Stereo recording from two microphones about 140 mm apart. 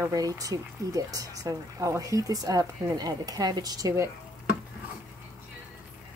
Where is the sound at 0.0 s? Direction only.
25° right (ahead or behind).